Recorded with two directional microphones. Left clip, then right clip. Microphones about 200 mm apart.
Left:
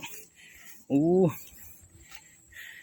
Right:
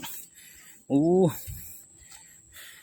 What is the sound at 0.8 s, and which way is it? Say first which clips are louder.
Speech: right 2 dB; 10° right (ahead or behind).